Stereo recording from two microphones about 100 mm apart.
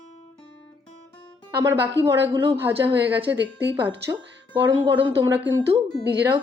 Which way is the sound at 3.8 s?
50° right (ahead or behind).